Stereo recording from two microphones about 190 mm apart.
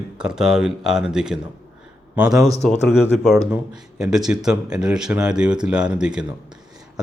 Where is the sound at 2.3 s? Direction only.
15° right (ahead or behind).